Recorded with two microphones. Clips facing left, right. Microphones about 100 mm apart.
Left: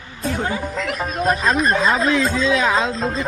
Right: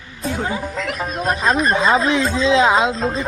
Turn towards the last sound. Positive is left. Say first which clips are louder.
# right 1 dB
turn(degrees=0)  # may be behind; listen again after turning